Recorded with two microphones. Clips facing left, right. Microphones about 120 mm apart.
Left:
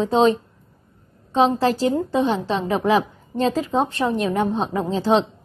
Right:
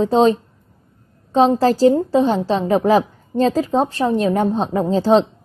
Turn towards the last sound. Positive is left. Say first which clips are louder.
# right 4 dB
turn(degrees=-35)  # may be behind; listen again after turning